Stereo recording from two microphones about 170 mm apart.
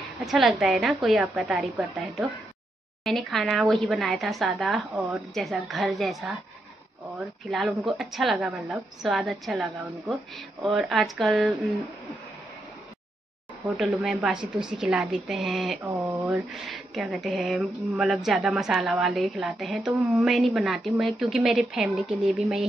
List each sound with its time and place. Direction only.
0.2 s speech: centre (ahead or behind)
13.7 s speech: centre (ahead or behind)
15.8 s mantra: 20° right (ahead or behind)
16.3 s speech: centre (ahead or behind)